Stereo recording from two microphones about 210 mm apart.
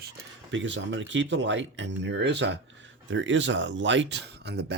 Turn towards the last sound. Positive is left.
turn(degrees=-50)  # may be behind; listen again after turning